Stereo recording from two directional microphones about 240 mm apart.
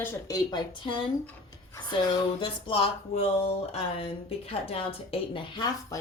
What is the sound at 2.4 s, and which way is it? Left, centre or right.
Speech, left.